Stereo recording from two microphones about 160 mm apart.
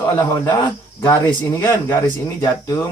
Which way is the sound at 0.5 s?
25° left (ahead or behind).